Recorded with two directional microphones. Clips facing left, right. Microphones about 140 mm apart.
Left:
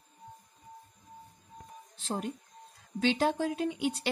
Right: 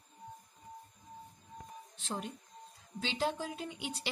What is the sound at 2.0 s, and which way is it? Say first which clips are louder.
Speech: left 6 dB; 45° left (ahead or behind).